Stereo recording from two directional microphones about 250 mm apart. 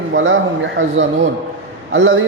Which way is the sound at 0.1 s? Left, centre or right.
Right.